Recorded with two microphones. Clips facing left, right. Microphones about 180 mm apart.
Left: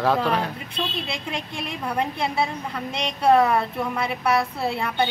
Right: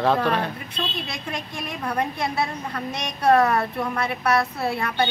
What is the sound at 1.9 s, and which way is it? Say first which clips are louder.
Speech: even; 10° left (ahead or behind).